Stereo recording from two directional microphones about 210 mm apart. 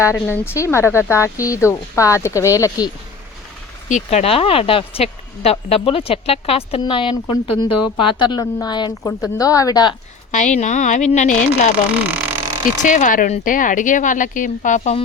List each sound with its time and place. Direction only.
0.0 s speech: 10° left (ahead or behind)
3.8 s speech: 35° left (ahead or behind); by 9.9 s 15° left (ahead or behind)
10.3 s a woman's voice: 35° left (ahead or behind)
11.9 s a sound: 10° right (ahead or behind)
12.8 s a woman's voice: 35° left (ahead or behind)